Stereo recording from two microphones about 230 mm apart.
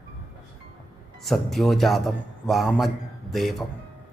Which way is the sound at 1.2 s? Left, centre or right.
Centre.